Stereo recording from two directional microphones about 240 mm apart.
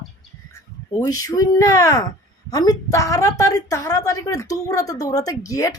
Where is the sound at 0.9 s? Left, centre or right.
Centre.